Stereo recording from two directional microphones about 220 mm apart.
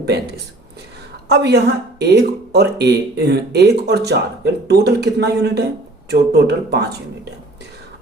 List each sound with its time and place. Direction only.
0.0 s speech: 45° right (ahead or behind)